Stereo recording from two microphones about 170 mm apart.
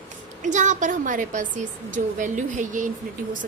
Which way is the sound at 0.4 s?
45° right (ahead or behind).